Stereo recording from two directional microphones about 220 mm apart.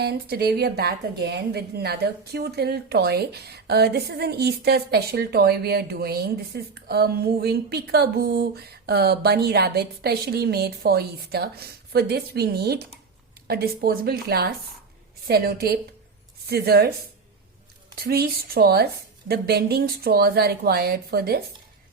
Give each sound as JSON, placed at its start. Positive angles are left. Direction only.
{"t": 0.0, "sound": "a woman's voice", "side_deg": -45}
{"t": 17.9, "sound": "a woman's voice", "side_deg": -45}